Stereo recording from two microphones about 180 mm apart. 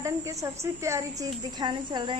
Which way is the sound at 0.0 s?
15° right (ahead or behind).